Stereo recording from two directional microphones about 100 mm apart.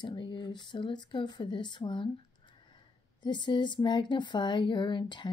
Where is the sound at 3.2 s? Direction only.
50° left (ahead or behind).